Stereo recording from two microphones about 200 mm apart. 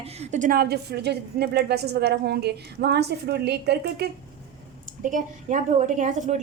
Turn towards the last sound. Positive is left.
turn(degrees=-35)  # may be behind; listen again after turning